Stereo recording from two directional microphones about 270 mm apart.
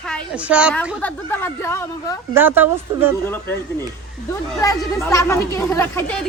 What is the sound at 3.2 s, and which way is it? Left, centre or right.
Speech, centre.